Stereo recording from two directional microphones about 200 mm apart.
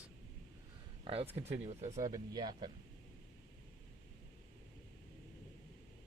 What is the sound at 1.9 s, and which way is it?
Speech, 15° right (ahead or behind).